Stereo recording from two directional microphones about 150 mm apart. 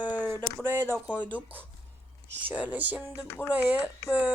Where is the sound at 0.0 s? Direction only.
10° right (ahead or behind).